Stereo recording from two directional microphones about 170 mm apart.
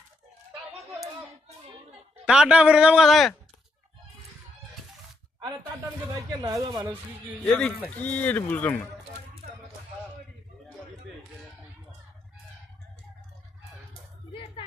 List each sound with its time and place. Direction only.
2.2 s a man's voice: 5° right (ahead or behind)
6.4 s speech: 20° right (ahead or behind)
7.4 s a man's voice: centre (ahead or behind)